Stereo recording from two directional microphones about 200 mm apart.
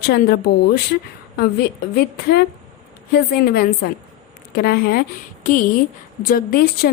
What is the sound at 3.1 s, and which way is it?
Speech, 50° left (ahead or behind).